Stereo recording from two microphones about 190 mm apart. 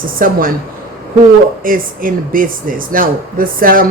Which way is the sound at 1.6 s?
45° right (ahead or behind).